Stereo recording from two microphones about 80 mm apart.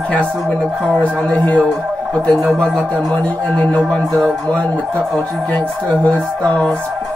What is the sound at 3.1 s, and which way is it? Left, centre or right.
Speech, centre.